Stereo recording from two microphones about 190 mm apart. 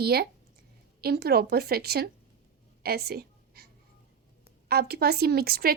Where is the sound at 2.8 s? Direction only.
55° right (ahead or behind).